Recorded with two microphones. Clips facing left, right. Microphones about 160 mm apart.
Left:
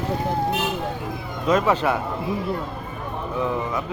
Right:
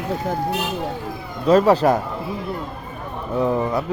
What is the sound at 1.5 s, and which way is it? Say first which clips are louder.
Speech: right 5 dB; 35° right (ahead or behind).